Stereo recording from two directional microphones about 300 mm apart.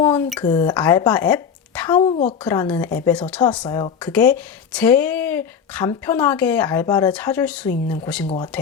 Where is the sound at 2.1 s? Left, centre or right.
Centre.